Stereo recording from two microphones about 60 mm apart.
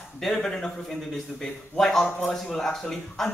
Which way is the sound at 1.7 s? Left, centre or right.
Centre.